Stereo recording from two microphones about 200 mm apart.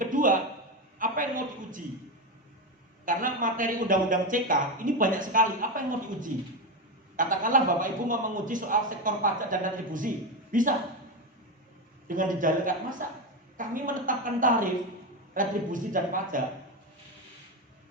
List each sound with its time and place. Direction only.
0.0 s a sound: 40° right (ahead or behind)
3.1 s a man's voice: 40° right (ahead or behind)
12.0 s a man's voice: 40° right (ahead or behind)